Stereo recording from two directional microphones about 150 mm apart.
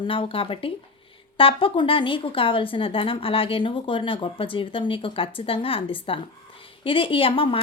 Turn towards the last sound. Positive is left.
turn(degrees=35)  # may be behind; listen again after turning